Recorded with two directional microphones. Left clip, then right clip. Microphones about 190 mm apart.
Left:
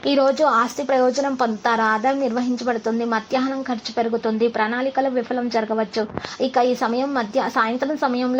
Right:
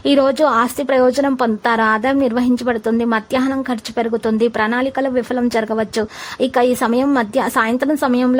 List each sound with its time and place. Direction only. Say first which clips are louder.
0.0 s a woman's voice: right 4 dB; 30° right (ahead or behind)